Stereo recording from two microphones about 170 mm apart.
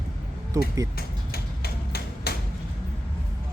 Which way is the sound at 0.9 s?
65° left (ahead or behind).